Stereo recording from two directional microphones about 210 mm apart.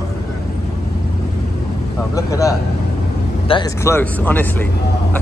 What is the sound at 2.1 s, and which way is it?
Speech, 15° left (ahead or behind).